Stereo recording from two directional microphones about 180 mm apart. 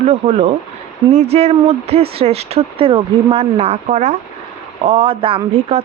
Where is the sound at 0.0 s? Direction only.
35° right (ahead or behind).